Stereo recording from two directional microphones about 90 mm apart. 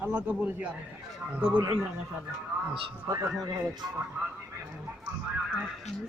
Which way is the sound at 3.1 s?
40° right (ahead or behind).